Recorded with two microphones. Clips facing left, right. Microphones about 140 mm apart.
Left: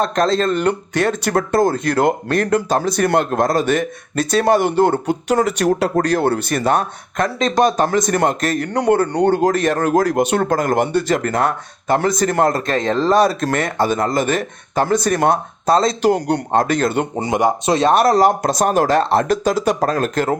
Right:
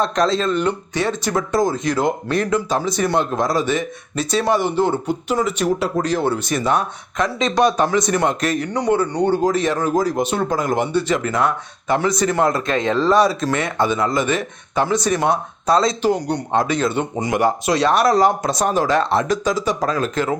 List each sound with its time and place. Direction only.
0.2 s speech: 50° left (ahead or behind)
17.2 s speech: 30° left (ahead or behind)
17.9 s speech: 45° left (ahead or behind)